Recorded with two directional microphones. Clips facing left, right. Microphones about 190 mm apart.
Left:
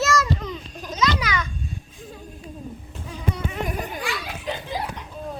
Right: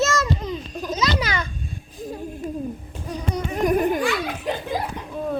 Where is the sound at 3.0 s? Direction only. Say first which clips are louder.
Right 2 dB; 40° right (ahead or behind).